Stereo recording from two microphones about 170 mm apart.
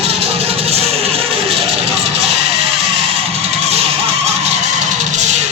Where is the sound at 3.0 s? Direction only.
35° right (ahead or behind).